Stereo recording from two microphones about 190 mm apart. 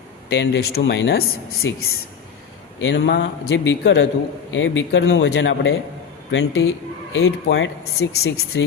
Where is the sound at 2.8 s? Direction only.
70° left (ahead or behind).